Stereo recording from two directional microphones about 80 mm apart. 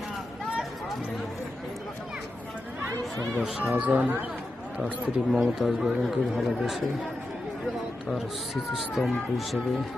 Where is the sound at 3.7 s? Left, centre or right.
Centre.